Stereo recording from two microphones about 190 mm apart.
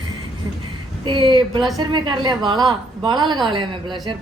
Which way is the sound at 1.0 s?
25° right (ahead or behind).